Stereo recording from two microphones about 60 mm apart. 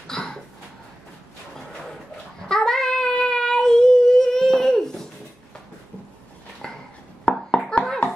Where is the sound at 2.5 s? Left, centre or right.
Centre.